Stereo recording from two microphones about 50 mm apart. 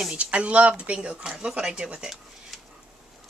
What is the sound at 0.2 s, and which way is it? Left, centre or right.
A woman's voice, right.